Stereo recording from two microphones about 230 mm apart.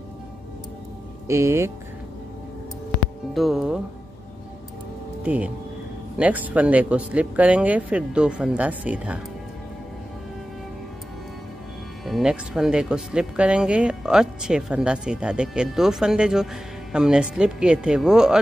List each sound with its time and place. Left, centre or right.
1.2 s speech: centre
3.3 s speech: centre
5.2 s speech: centre
12.0 s speech: centre